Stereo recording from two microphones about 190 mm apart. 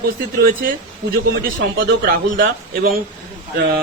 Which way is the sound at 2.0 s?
50° right (ahead or behind).